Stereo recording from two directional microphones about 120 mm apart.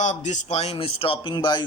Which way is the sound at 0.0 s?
90° left.